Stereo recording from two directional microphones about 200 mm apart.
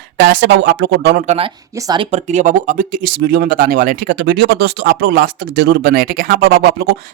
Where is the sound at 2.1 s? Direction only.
35° right (ahead or behind).